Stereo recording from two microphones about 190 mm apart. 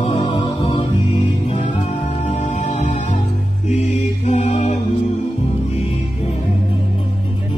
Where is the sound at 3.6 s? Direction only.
35° left (ahead or behind).